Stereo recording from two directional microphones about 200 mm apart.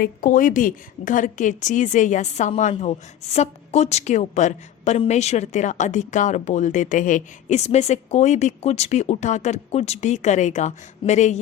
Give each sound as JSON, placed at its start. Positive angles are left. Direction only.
{"t": 0.0, "sound": "a woman's voice", "side_deg": 40}